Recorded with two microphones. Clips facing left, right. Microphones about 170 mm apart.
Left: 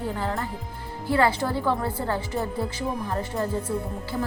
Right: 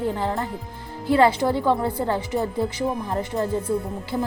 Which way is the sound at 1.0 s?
20° right (ahead or behind).